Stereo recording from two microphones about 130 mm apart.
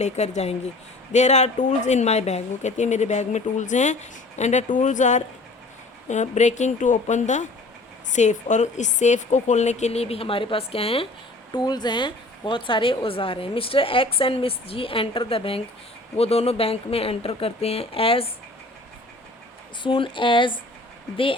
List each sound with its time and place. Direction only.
0.0 s speech: 60° left (ahead or behind)
11.5 s speech: 35° left (ahead or behind)
19.8 s speech: 40° left (ahead or behind)